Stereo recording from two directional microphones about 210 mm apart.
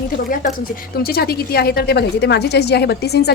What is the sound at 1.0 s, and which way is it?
A woman's voice, 45° left (ahead or behind).